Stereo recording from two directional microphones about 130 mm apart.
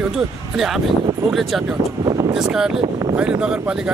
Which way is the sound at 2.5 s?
5° right (ahead or behind).